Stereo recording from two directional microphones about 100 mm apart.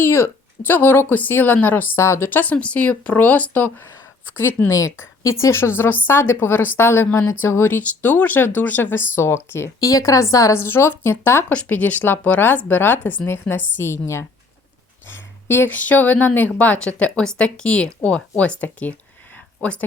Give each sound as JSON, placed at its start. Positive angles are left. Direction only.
{"t": 0.0, "sound": "a woman's voice", "side_deg": 25}
{"t": 15.4, "sound": "speech", "side_deg": 20}